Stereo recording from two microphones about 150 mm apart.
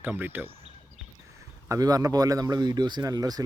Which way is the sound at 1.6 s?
20° right (ahead or behind).